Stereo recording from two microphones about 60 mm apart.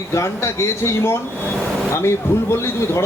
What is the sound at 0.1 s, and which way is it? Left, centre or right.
Speech, left.